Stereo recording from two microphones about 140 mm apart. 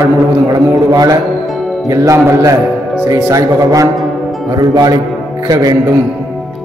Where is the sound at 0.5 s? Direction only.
25° right (ahead or behind).